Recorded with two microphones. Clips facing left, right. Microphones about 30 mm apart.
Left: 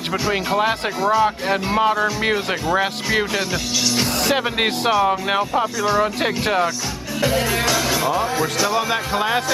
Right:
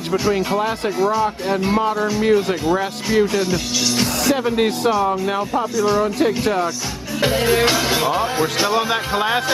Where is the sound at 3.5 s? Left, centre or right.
Centre.